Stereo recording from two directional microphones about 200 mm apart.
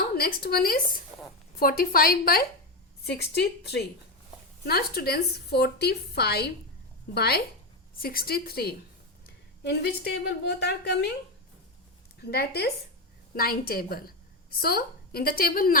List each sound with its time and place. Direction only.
0.2 s a woman's voice: 50° left (ahead or behind)
12.2 s a woman's voice: 55° left (ahead or behind)